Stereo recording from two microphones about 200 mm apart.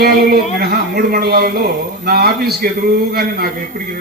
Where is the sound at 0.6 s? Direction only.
50° right (ahead or behind).